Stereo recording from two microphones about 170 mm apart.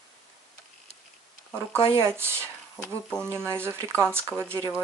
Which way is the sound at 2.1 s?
15° right (ahead or behind).